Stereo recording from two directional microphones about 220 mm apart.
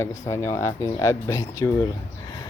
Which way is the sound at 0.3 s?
15° left (ahead or behind).